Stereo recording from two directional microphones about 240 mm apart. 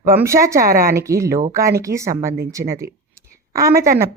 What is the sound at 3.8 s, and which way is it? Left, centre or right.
Speech, right.